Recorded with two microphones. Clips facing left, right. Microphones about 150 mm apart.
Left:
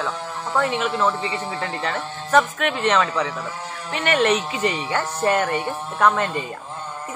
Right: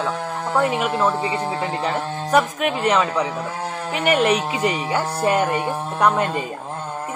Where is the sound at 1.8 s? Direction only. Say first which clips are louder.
Right 4 dB; 10° right (ahead or behind).